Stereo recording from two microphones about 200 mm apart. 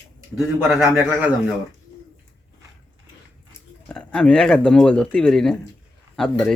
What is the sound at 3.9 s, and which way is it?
Speech, 5° left (ahead or behind).